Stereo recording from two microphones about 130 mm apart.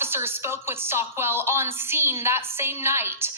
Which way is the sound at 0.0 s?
20° right (ahead or behind).